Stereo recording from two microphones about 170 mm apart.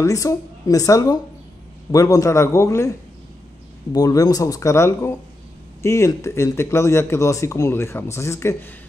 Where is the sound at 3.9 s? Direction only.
20° left (ahead or behind).